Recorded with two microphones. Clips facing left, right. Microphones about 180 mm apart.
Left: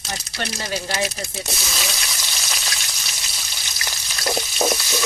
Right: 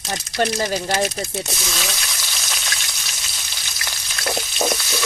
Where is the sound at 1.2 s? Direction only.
Centre (ahead or behind).